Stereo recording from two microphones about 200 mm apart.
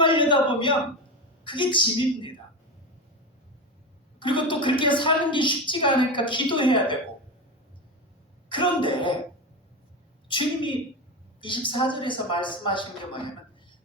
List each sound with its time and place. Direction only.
0.0 s a sound: 25° left (ahead or behind)
1.5 s a woman's voice: 25° left (ahead or behind)
4.2 s a woman's voice: 25° left (ahead or behind)
8.4 s a woman's voice: 25° left (ahead or behind)
10.2 s a woman's voice: 25° left (ahead or behind)